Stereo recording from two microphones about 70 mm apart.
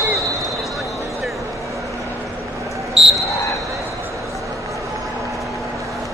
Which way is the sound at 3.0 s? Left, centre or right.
Centre.